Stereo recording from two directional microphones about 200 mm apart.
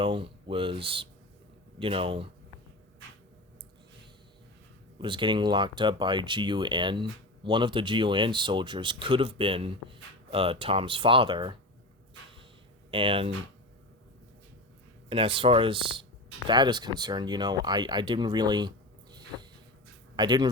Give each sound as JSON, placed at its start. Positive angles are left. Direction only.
{"t": 0.0, "sound": "speech", "side_deg": -25}
{"t": 4.9, "sound": "speech", "side_deg": -25}
{"t": 12.9, "sound": "speech", "side_deg": -25}
{"t": 15.1, "sound": "speech", "side_deg": -25}
{"t": 20.1, "sound": "speech", "side_deg": -20}